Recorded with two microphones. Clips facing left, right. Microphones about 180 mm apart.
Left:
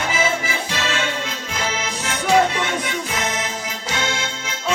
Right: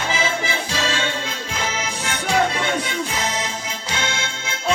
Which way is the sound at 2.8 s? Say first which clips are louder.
Even; 30° right (ahead or behind).